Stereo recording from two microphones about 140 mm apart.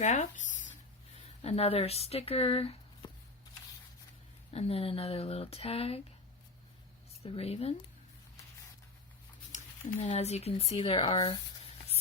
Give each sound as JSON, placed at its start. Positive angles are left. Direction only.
{"t": 0.0, "sound": "speech", "side_deg": 60}
{"t": 1.1, "sound": "speech", "side_deg": 45}
{"t": 4.5, "sound": "speech", "side_deg": 45}
{"t": 7.2, "sound": "speech", "side_deg": 45}
{"t": 9.5, "sound": "speech", "side_deg": 55}